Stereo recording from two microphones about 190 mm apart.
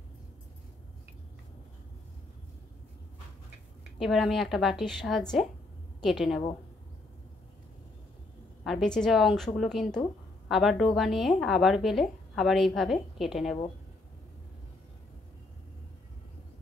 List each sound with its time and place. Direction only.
4.0 s a woman's voice: centre (ahead or behind)
8.6 s speech: centre (ahead or behind)